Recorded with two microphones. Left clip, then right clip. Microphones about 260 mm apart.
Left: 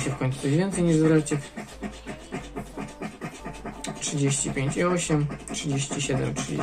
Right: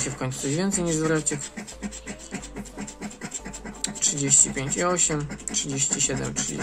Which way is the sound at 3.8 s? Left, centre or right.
Centre.